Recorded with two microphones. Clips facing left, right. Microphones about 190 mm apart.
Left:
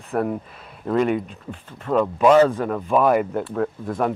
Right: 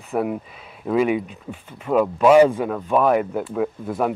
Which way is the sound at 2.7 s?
Centre (ahead or behind).